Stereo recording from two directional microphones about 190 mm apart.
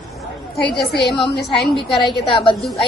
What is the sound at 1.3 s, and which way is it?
Speech, 60° left (ahead or behind).